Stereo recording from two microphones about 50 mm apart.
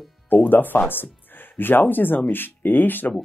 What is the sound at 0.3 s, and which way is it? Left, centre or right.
Speech, left.